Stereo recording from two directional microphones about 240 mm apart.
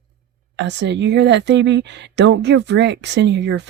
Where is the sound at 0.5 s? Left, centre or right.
Right.